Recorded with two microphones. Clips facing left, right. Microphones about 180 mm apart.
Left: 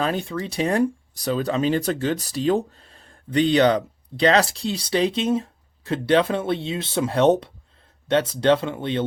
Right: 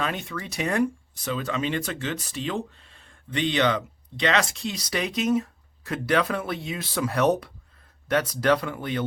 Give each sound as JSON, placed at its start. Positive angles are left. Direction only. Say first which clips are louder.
{"t": 0.0, "sound": "speech", "louder": "left 6 dB", "side_deg": 35}